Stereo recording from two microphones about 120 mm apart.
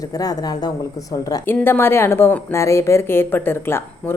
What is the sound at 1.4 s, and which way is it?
A woman's voice, 20° left (ahead or behind).